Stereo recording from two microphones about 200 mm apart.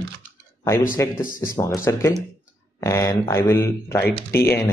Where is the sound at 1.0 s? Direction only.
10° left (ahead or behind).